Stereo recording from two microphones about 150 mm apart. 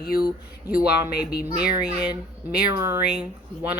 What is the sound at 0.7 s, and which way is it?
Speech, 10° right (ahead or behind).